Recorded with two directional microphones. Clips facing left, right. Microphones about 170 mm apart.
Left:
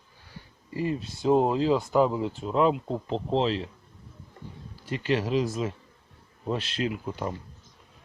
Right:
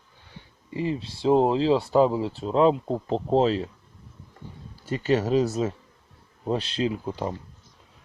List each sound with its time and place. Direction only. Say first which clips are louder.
0.7 s speech: right 1 dB; 25° right (ahead or behind)
3.1 s speech: right 4 dB; 40° right (ahead or behind)
5.1 s speech: right 4 dB; 40° right (ahead or behind)